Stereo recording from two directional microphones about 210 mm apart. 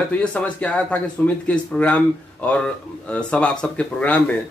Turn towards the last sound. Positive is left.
turn(degrees=5)  # may be behind; listen again after turning